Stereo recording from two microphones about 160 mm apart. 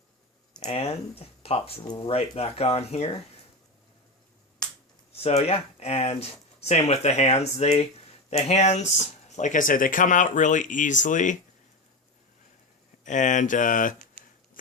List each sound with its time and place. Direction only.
0.6 s speech: 35° left (ahead or behind)
5.2 s speech: 40° left (ahead or behind)
13.1 s speech: 50° left (ahead or behind)